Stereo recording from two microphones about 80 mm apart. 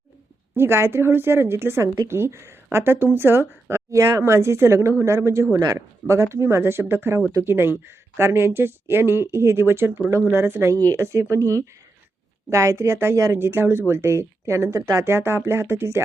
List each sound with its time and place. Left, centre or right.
0.5 s speech: right